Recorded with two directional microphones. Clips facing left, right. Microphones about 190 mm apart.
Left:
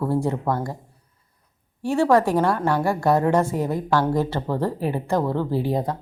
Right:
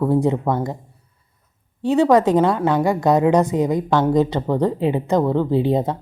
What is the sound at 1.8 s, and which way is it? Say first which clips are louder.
A woman's voice: right 4 dB; 20° right (ahead or behind).